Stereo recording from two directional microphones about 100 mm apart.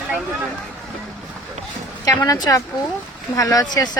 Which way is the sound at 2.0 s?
35° left (ahead or behind).